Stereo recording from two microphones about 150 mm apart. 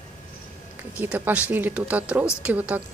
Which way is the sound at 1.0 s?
10° right (ahead or behind).